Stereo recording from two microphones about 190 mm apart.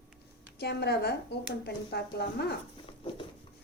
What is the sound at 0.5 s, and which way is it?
Speech, 60° left (ahead or behind).